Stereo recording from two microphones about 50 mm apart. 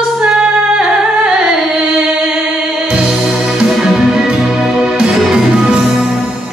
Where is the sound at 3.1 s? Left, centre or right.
Centre.